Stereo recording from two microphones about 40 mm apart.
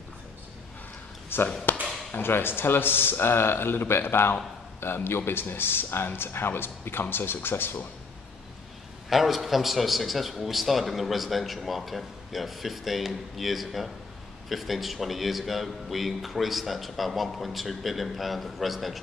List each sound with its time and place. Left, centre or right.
1.3 s a sound: left
1.7 s chop: left
2.2 s a man's voice: left
9.1 s a man's voice: centre